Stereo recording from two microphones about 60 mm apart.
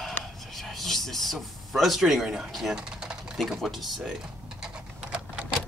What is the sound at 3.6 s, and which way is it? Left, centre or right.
Speech, centre.